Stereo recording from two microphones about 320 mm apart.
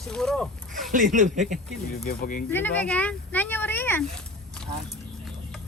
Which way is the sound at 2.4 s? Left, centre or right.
Centre.